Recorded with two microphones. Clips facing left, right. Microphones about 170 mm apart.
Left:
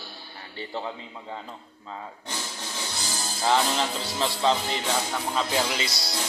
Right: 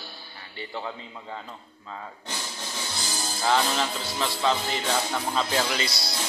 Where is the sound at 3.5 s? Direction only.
20° left (ahead or behind).